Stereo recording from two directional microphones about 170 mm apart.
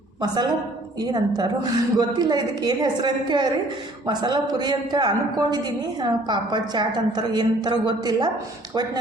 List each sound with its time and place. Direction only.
0.2 s a woman's voice: 25° right (ahead or behind)